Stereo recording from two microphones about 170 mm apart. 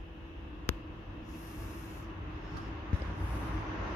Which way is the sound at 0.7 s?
15° left (ahead or behind).